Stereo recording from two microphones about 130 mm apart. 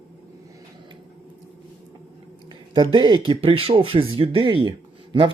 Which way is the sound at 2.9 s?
35° right (ahead or behind).